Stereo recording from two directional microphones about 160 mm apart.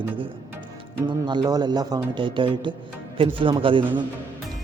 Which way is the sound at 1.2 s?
25° right (ahead or behind).